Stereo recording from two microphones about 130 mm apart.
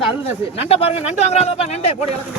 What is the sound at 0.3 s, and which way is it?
A man's voice, 50° left (ahead or behind).